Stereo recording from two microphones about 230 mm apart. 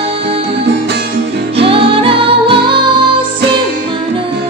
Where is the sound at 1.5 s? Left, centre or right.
Right.